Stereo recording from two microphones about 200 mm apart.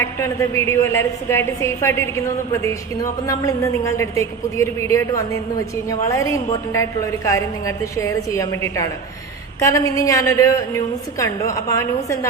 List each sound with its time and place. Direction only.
0.0 s a woman's voice: 15° left (ahead or behind)